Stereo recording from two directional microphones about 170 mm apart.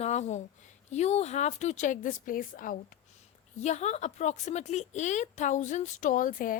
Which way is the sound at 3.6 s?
40° left (ahead or behind).